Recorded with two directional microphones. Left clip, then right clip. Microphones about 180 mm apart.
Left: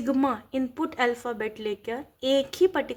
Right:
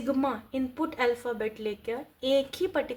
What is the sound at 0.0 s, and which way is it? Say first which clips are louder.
A woman's voice: left 3 dB; 45° left (ahead or behind).